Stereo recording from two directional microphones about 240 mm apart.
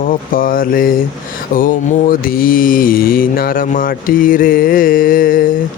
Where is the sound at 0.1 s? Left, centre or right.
Left.